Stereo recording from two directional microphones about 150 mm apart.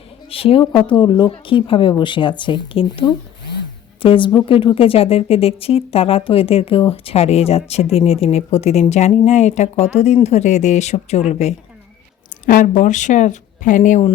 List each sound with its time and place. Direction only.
0.3 s a woman's voice: 40° left (ahead or behind)
12.5 s speech: 65° left (ahead or behind)